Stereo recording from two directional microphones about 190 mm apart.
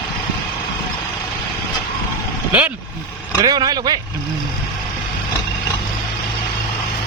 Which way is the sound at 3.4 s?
20° right (ahead or behind).